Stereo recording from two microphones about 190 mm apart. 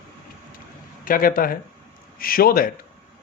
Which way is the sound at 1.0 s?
50° left (ahead or behind).